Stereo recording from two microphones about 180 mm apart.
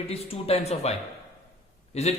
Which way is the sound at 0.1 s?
35° left (ahead or behind).